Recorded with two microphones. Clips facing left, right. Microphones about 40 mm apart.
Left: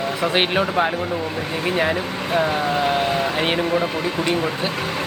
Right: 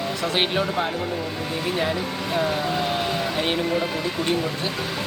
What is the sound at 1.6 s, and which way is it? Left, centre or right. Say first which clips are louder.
Speech: left 4 dB; left.